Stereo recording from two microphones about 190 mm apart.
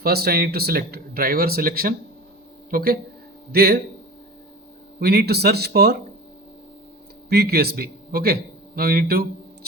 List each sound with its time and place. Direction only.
0.0 s speech: 55° right (ahead or behind)
4.9 s speech: 55° right (ahead or behind)
7.3 s a man's voice: 55° right (ahead or behind)